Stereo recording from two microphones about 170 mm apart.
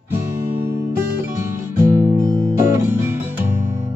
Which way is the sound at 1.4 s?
20° right (ahead or behind).